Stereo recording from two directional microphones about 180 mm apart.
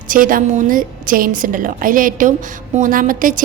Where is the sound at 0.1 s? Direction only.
50° right (ahead or behind).